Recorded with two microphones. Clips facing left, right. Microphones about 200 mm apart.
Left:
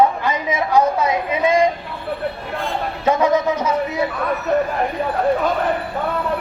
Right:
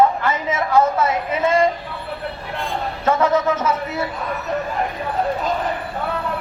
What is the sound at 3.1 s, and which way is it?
Speech, 15° left (ahead or behind).